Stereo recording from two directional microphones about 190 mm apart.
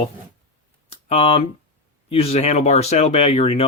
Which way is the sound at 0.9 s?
30° left (ahead or behind).